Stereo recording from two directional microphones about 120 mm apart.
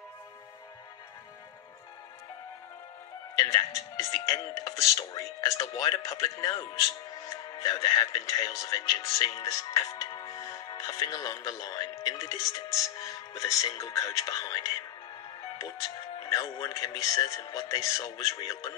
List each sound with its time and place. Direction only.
3.3 s speech: 30° left (ahead or behind)
16.2 s speech: 30° left (ahead or behind)